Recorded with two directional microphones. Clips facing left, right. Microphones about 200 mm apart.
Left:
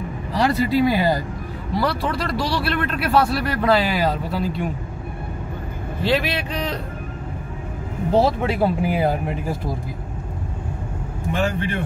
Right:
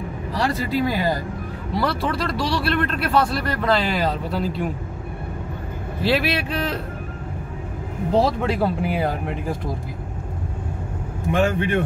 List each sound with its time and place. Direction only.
0.4 s speech: 15° left (ahead or behind)
1.7 s speech: centre (ahead or behind)
6.0 s speech: 5° right (ahead or behind)
8.1 s speech: 5° left (ahead or behind)
11.3 s speech: 55° right (ahead or behind)